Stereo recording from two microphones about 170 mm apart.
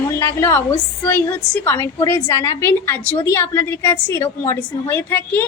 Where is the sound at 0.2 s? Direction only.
15° left (ahead or behind).